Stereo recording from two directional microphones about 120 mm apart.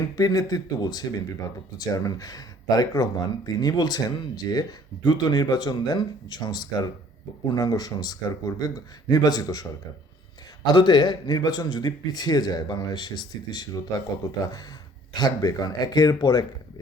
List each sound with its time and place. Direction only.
0.2 s a man's voice: 30° left (ahead or behind)
10.7 s a man's voice: 35° left (ahead or behind)